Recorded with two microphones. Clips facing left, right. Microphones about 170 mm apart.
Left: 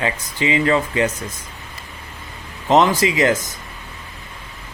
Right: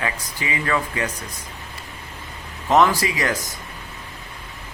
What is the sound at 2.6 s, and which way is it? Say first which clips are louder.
Speech: left 2 dB; 20° left (ahead or behind).